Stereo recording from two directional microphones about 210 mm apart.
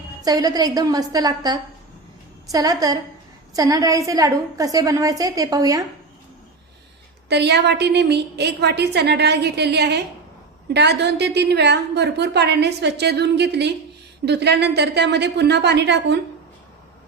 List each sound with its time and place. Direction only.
0.2 s a woman's voice: 15° right (ahead or behind)
7.3 s a woman's voice: 55° right (ahead or behind)